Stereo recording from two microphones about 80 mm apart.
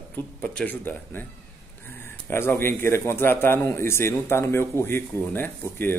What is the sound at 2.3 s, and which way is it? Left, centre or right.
A man's voice, left.